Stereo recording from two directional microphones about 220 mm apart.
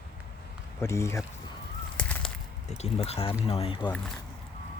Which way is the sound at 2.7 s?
30° left (ahead or behind).